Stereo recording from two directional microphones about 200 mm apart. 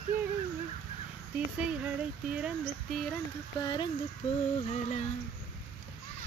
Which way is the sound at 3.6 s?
20° left (ahead or behind).